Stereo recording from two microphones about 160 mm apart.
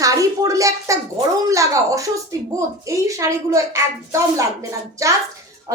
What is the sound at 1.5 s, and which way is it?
Speech, 20° right (ahead or behind).